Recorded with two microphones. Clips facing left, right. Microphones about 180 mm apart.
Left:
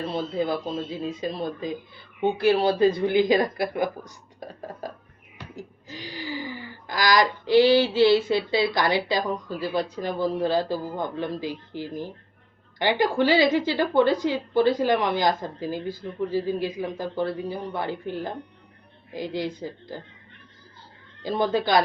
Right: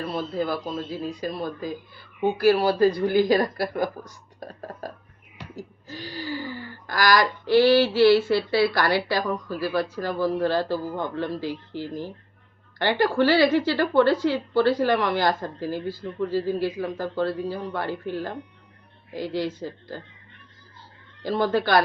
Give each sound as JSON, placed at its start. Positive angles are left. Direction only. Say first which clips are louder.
{"t": 0.0, "sound": "a woman's voice", "louder": "left 1 dB", "side_deg": 25}
{"t": 21.2, "sound": "a woman's voice", "louder": "right 1 dB", "side_deg": 15}